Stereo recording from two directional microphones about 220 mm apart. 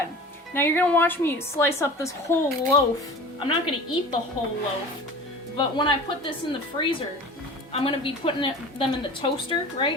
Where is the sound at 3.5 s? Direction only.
25° left (ahead or behind).